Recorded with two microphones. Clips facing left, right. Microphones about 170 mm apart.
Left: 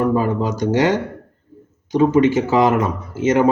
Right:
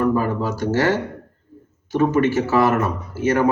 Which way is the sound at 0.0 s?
15° left (ahead or behind).